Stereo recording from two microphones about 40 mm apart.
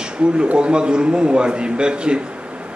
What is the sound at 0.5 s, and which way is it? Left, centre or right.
A man's voice, right.